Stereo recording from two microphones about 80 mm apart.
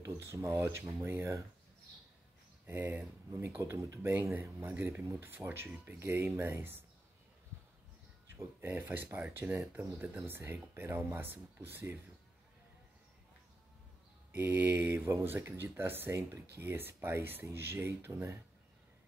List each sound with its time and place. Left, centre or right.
0.0 s speech: right
2.6 s speech: right
8.5 s speech: right
14.3 s speech: right